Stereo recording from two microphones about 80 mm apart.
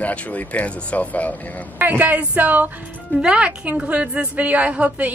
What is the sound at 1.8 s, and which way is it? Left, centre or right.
Speech, right.